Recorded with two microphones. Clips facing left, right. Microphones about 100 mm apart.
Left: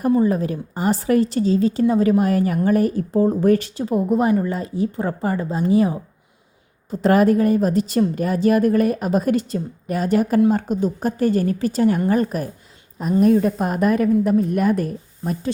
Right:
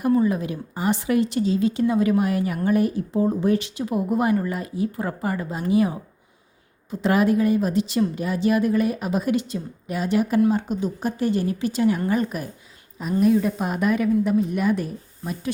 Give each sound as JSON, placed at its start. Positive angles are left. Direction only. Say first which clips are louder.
{"t": 0.3, "sound": "a woman's voice", "louder": "left 4 dB", "side_deg": 40}
{"t": 6.9, "sound": "a woman's voice", "louder": "left 4 dB", "side_deg": 40}